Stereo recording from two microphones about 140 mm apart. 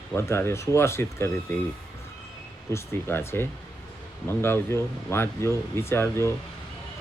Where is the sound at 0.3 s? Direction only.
20° left (ahead or behind).